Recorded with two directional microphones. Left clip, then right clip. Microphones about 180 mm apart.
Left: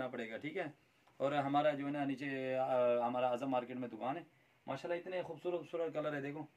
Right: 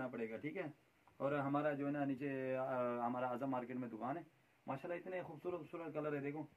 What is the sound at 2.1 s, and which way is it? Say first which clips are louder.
Speech: left 4 dB; 30° left (ahead or behind).